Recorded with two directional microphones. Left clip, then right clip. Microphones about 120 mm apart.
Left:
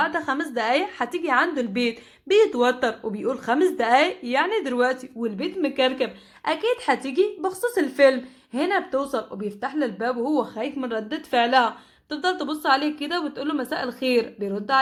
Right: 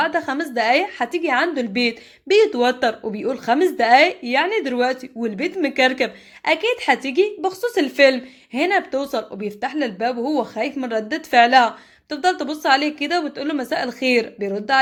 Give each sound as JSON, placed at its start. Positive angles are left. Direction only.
{"t": 0.0, "sound": "speech", "side_deg": -40}